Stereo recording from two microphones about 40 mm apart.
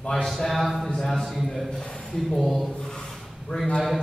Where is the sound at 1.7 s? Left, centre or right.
Left.